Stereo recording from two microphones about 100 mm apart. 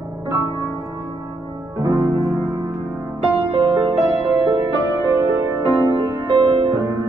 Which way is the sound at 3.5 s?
50° right (ahead or behind).